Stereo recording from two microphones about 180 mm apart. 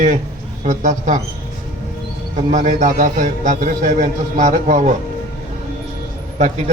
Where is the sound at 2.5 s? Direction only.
45° right (ahead or behind).